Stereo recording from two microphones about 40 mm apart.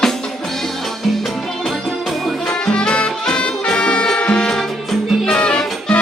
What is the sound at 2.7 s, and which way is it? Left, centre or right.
Music, left.